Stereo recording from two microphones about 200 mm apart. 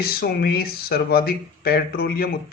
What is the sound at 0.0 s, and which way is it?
Speech, 50° left (ahead or behind).